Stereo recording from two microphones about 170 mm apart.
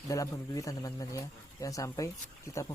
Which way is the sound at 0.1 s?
20° left (ahead or behind).